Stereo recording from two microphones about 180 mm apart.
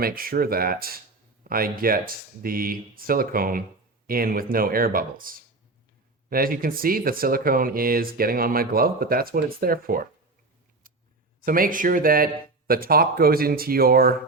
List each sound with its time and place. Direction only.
0.0 s speech: 55° right (ahead or behind)
6.3 s speech: 55° right (ahead or behind)
11.4 s speech: 50° right (ahead or behind)